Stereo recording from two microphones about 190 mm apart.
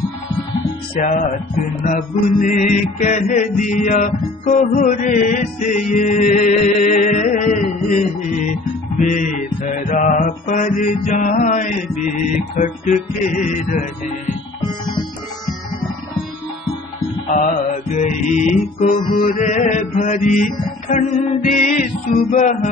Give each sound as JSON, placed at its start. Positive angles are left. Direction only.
{"t": 1.0, "sound": "music", "side_deg": 45}
{"t": 1.9, "sound": "mantra", "side_deg": 45}
{"t": 17.3, "sound": "mantra", "side_deg": 40}
{"t": 21.6, "sound": "music", "side_deg": 45}